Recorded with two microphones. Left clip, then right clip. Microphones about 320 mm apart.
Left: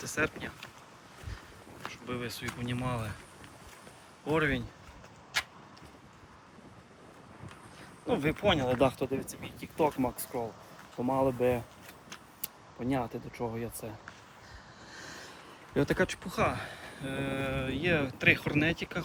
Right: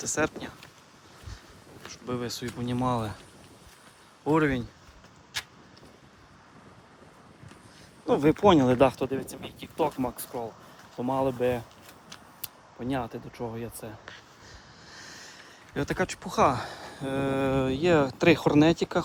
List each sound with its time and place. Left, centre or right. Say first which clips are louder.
0.0 s speech: right 4 dB; centre
1.8 s speech: right 4 dB; centre
4.3 s speech: right 5 dB; centre
8.0 s speech: right 7 dB; centre
12.8 s speech: right 1 dB; centre